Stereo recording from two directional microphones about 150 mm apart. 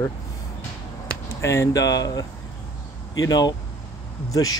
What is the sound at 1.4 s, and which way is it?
Speech, 20° left (ahead or behind).